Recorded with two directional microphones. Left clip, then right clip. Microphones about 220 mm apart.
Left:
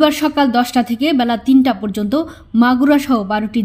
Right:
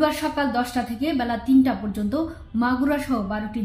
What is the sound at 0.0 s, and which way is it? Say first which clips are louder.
A woman's voice: left 9 dB; 40° left (ahead or behind).